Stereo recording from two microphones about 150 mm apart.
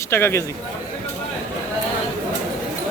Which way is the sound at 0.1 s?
15° left (ahead or behind).